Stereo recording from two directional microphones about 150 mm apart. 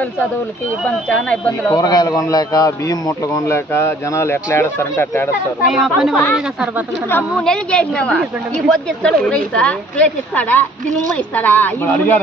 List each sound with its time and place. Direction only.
1.0 s speech: 5° left (ahead or behind)
1.7 s a man's voice: 25° left (ahead or behind)
5.7 s speech: centre (ahead or behind)
7.1 s a woman's voice: 10° left (ahead or behind)